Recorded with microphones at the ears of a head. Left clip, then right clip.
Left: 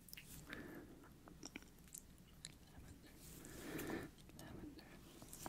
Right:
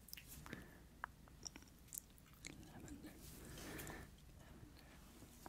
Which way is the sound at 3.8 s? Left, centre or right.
Left.